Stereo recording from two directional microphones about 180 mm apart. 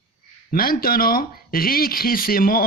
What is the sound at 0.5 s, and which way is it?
Speech, 55° left (ahead or behind).